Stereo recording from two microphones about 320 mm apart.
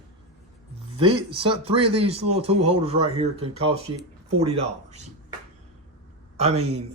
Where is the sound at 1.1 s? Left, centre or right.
Centre.